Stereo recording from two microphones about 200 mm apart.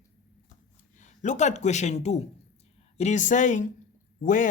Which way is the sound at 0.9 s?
35° left (ahead or behind).